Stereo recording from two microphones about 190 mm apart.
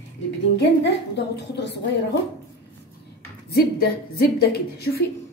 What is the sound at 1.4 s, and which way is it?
Speech, 65° left (ahead or behind).